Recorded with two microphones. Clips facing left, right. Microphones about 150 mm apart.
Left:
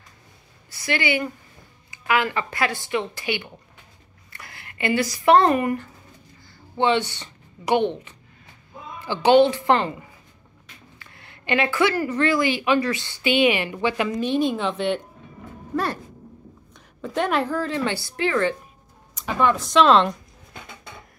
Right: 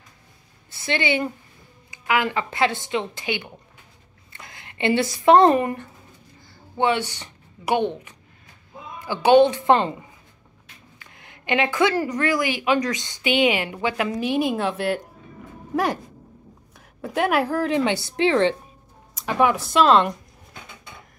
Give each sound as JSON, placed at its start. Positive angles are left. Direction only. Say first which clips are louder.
{"t": 0.7, "sound": "speech", "louder": "right 1 dB", "side_deg": -25}
{"t": 6.8, "sound": "a woman's voice", "louder": "left 1 dB", "side_deg": -10}
{"t": 9.0, "sound": "speech", "louder": "right 1 dB", "side_deg": -10}
{"t": 11.0, "sound": "a sound", "louder": "even", "side_deg": -15}
{"t": 12.2, "sound": "speech", "louder": "left 2 dB", "side_deg": -10}
{"t": 17.0, "sound": "speech", "louder": "right 2 dB", "side_deg": -10}
{"t": 19.1, "sound": "speech", "louder": "right 1 dB", "side_deg": -5}